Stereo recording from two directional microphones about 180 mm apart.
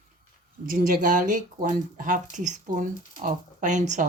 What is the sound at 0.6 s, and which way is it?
Speech, 50° right (ahead or behind).